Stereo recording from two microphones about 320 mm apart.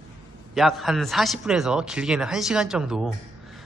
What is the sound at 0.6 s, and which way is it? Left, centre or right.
A man's voice, centre.